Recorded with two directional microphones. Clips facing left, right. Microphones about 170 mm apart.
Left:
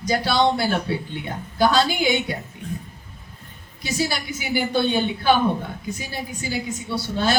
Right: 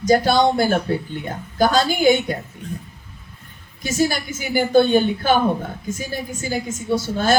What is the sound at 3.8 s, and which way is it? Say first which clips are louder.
A woman's voice: right 5 dB; 45° right (ahead or behind).